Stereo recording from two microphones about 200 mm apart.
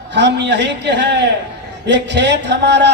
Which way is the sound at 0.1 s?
60° right (ahead or behind).